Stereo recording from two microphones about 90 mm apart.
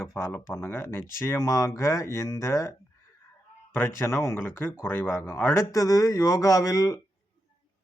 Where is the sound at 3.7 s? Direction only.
25° left (ahead or behind); by 7.0 s 45° left (ahead or behind).